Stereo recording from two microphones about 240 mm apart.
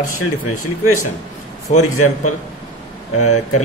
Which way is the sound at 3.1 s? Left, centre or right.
Left.